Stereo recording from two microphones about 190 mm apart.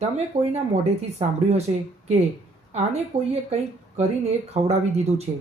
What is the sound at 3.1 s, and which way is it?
Speech, 35° right (ahead or behind).